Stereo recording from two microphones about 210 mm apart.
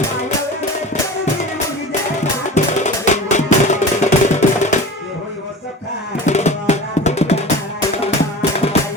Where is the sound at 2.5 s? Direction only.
35° left (ahead or behind).